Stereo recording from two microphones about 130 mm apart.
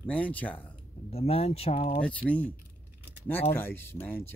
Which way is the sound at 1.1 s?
50° left (ahead or behind).